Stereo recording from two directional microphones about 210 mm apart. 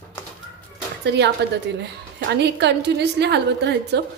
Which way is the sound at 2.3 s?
55° right (ahead or behind).